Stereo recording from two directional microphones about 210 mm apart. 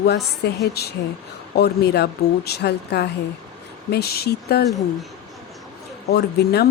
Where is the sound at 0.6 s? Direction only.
50° left (ahead or behind).